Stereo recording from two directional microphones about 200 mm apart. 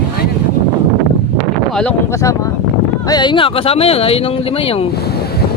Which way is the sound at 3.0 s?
20° left (ahead or behind).